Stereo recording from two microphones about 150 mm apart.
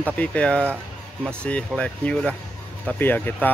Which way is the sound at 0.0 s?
10° left (ahead or behind).